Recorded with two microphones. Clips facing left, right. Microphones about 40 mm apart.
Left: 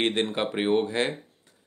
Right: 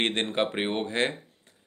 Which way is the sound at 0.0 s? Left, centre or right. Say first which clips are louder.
Left 1 dB; right.